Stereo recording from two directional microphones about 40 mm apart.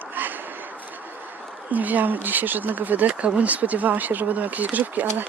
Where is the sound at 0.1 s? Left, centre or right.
Right.